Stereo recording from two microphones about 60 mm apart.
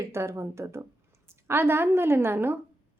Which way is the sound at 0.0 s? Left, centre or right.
Right.